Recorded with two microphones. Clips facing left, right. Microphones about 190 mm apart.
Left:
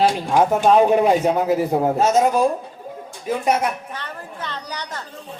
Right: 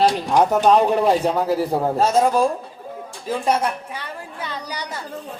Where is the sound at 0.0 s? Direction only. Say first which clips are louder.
Even; 40° right (ahead or behind).